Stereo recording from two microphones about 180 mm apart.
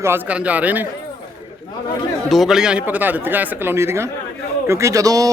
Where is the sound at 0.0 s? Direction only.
10° right (ahead or behind).